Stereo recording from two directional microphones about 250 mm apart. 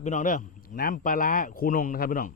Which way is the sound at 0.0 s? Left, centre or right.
Left.